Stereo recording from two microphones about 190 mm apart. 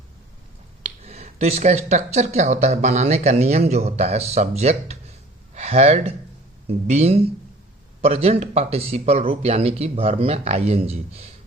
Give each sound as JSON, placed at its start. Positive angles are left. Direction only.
{"t": 0.8, "sound": "speech", "side_deg": -35}